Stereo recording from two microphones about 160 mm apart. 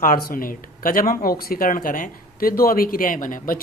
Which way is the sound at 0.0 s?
60° left (ahead or behind).